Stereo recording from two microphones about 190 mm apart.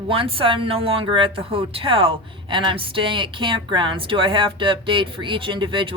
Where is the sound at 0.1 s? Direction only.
30° right (ahead or behind).